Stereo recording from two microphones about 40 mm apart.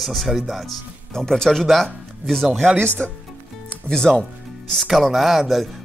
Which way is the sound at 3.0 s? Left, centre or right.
Right.